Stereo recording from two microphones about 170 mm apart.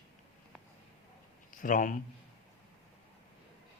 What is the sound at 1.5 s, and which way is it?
Speech, 50° left (ahead or behind).